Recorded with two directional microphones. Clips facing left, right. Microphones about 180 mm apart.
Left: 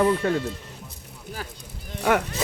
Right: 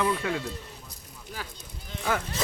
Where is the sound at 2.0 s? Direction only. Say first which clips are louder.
Left 7 dB; 70° left (ahead or behind).